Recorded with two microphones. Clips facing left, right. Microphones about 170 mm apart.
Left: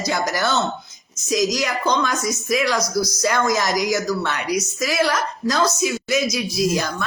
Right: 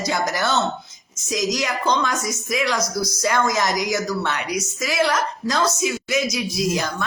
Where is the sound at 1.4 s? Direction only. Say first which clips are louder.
Left 1 dB; 20° right (ahead or behind).